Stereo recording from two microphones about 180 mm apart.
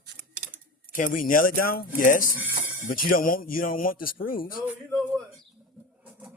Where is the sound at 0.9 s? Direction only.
50° left (ahead or behind).